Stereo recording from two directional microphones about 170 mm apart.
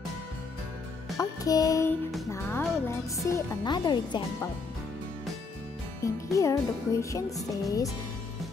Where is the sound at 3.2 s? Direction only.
20° left (ahead or behind).